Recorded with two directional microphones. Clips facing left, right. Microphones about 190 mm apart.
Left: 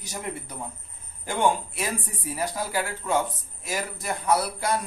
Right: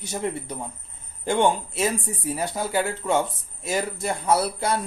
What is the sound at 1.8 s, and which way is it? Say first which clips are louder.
Speech: right 6 dB; 25° right (ahead or behind).